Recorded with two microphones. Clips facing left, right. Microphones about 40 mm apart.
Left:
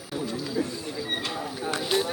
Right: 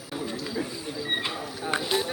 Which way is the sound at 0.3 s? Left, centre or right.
Centre.